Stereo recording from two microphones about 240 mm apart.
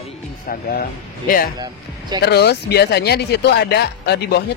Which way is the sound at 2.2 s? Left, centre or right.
Left.